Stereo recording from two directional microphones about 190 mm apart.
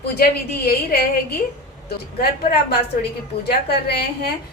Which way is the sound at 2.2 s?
55° left (ahead or behind).